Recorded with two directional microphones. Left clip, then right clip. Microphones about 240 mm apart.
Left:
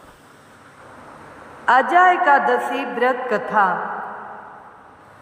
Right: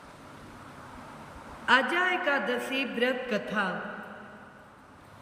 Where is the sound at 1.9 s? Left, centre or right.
Left.